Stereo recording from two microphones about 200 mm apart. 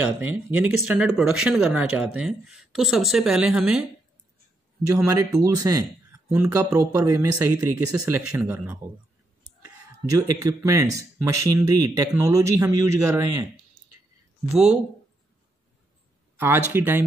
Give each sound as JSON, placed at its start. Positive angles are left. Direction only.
{"t": 0.5, "sound": "a man's voice", "side_deg": -10}
{"t": 4.8, "sound": "a man's voice", "side_deg": -15}
{"t": 10.0, "sound": "a man's voice", "side_deg": -15}
{"t": 14.5, "sound": "speech", "side_deg": 0}
{"t": 16.3, "sound": "a man's voice", "side_deg": -10}